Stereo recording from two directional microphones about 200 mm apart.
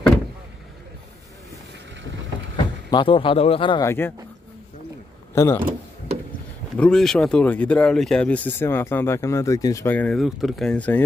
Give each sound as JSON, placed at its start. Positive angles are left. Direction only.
{"t": 2.5, "sound": "speech", "side_deg": 25}
{"t": 5.3, "sound": "speech", "side_deg": 15}
{"t": 6.8, "sound": "speech", "side_deg": 5}